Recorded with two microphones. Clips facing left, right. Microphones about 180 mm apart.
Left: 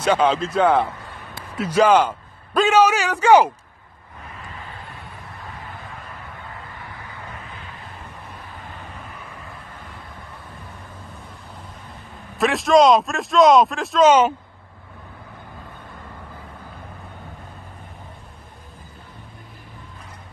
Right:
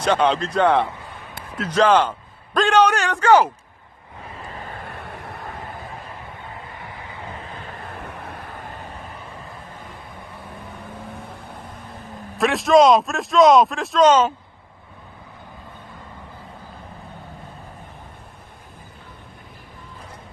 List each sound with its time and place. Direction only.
0.0 s a man's voice: 5° left (ahead or behind)
4.8 s vehicle: 60° right (ahead or behind)
7.8 s vehicle: 60° right (ahead or behind)
12.4 s speech: centre (ahead or behind)